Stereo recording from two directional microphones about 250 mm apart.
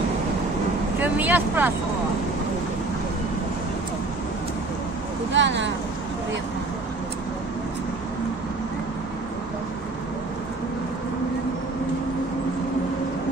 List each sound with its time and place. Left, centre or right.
1.0 s speech: centre
5.3 s speech: right